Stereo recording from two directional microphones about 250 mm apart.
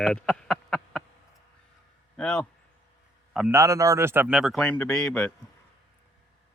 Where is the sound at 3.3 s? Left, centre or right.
Centre.